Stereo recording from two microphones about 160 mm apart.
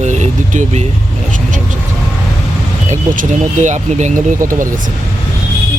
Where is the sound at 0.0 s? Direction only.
50° right (ahead or behind).